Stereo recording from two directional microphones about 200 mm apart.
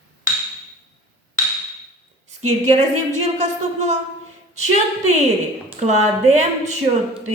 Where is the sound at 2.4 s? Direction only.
35° right (ahead or behind).